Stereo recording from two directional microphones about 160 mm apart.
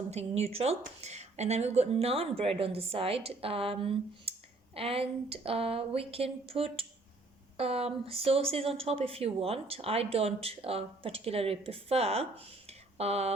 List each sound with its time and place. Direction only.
0.1 s speech: 40° right (ahead or behind)